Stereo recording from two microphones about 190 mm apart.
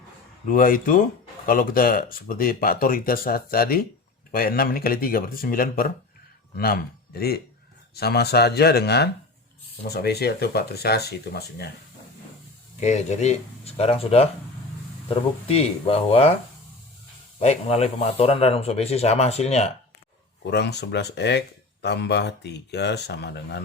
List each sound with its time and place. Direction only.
0.4 s speech: 45° left (ahead or behind)
12.8 s speech: 35° left (ahead or behind)
17.4 s speech: 35° left (ahead or behind)
20.5 s speech: 60° left (ahead or behind)